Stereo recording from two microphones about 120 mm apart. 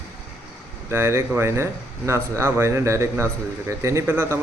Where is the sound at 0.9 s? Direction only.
20° right (ahead or behind).